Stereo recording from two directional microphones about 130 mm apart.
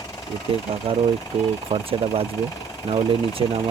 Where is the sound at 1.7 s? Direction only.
45° right (ahead or behind).